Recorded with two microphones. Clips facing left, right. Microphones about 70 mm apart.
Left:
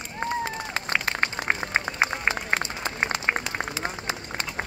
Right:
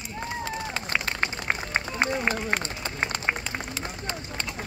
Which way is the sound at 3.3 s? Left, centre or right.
Left.